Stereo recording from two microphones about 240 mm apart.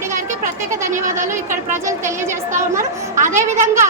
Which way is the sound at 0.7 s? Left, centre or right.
Centre.